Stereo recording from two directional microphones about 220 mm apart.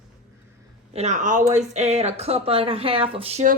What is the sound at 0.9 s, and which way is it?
Speech, 30° right (ahead or behind).